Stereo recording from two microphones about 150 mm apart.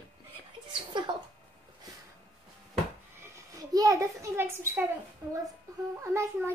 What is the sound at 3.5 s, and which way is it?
A child's voice, 25° right (ahead or behind).